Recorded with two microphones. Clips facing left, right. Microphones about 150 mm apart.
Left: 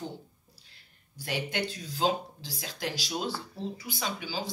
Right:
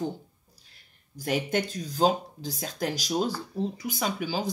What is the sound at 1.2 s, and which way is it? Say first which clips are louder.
Speech: right 5 dB; 45° right (ahead or behind).